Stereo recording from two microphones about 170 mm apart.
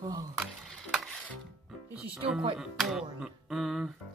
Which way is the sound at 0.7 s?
Centre (ahead or behind).